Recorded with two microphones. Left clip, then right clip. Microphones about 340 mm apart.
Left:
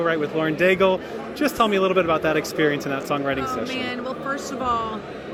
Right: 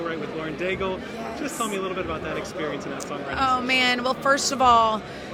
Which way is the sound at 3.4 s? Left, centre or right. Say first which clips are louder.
Right 5 dB; right.